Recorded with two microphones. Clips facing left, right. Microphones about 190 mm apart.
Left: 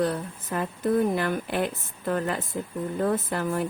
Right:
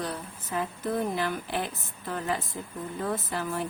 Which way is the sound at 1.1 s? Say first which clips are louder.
Left 4 dB; 55° left (ahead or behind).